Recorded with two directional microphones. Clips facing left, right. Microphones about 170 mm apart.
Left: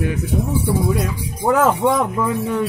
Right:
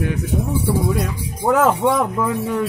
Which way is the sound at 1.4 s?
Centre (ahead or behind).